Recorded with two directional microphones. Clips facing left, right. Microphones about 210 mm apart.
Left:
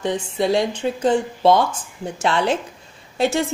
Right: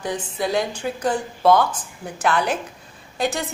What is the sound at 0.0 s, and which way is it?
Speech, 25° left (ahead or behind).